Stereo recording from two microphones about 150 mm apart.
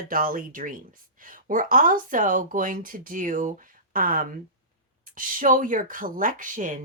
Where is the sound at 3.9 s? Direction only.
70° right (ahead or behind).